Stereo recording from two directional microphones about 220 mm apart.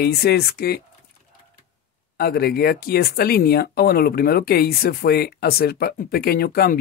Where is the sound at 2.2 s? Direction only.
45° left (ahead or behind).